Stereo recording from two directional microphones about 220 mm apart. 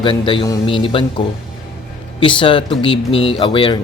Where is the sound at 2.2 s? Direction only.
25° left (ahead or behind).